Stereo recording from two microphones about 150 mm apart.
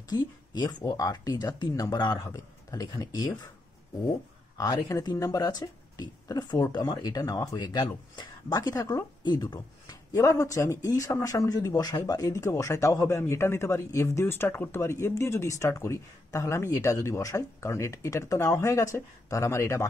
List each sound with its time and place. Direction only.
0.1 s speech: 25° left (ahead or behind)
4.6 s speech: 25° left (ahead or behind)